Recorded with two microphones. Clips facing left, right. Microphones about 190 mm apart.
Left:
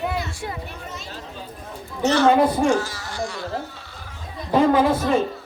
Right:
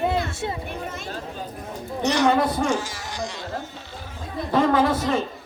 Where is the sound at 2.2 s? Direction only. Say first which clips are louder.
Left 4 dB; 15° left (ahead or behind).